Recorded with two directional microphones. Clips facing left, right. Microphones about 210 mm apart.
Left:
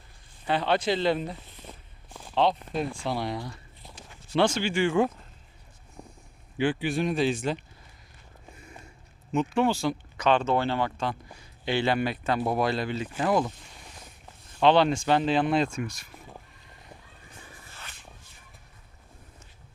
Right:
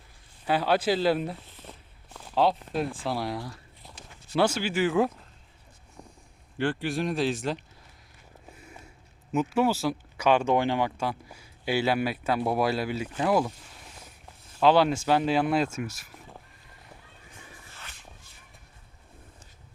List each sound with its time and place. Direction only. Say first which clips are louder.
0.4 s speech: right 1 dB; 5° right (ahead or behind)
6.0 s a sound: left 2 dB; 5° left (ahead or behind)
6.6 s speech: left 2 dB; centre (ahead or behind)
8.5 s a sound: left 2 dB; 5° right (ahead or behind)
9.3 s speech: even; 5° right (ahead or behind)
14.5 s speech: even; 5° right (ahead or behind)